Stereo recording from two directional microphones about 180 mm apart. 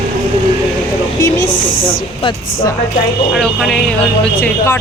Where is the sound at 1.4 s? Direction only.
45° left (ahead or behind).